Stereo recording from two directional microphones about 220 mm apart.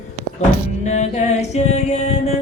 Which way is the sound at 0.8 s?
30° left (ahead or behind).